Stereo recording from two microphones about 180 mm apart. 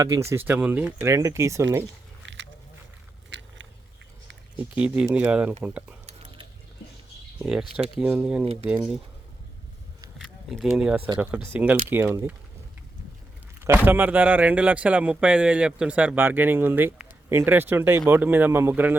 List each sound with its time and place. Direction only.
0.0 s speech: 15° right (ahead or behind)
2.2 s biting: 90° right
4.5 s speech: 5° right (ahead or behind)
6.1 s a sound: 30° right (ahead or behind)
7.3 s speech: 5° right (ahead or behind)
10.2 s a sound: centre (ahead or behind)
10.7 s speech: 5° right (ahead or behind)
13.6 s speech: 10° right (ahead or behind)